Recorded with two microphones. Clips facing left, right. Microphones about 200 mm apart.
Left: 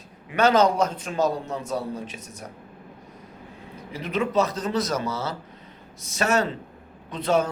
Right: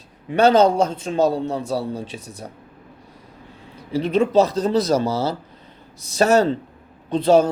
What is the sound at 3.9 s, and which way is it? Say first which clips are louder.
A man's voice: right 8 dB; 30° right (ahead or behind).